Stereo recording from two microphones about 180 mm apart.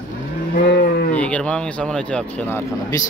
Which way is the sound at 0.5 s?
55° left (ahead or behind).